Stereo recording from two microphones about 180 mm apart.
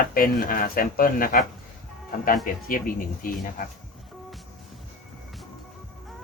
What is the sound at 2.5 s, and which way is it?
Speech, 50° left (ahead or behind).